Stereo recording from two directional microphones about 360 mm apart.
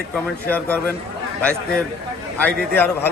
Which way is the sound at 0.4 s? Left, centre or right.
Centre.